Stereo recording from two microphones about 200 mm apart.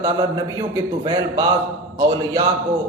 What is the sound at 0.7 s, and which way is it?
Speech, 20° right (ahead or behind).